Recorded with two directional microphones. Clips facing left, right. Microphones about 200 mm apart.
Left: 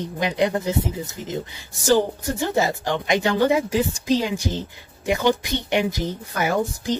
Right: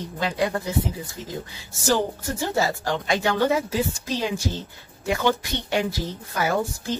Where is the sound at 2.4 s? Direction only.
20° left (ahead or behind).